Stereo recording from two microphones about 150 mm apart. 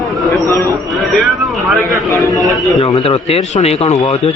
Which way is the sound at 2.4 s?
Centre (ahead or behind).